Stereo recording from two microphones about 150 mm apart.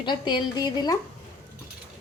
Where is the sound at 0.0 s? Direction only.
30° left (ahead or behind).